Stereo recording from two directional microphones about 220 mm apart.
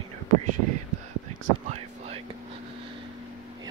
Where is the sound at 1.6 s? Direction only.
30° right (ahead or behind).